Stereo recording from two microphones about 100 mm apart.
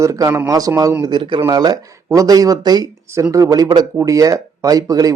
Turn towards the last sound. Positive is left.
turn(degrees=-35)  # may be behind; listen again after turning